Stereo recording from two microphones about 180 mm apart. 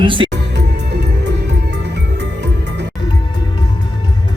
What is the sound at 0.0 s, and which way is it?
Speech, 30° right (ahead or behind).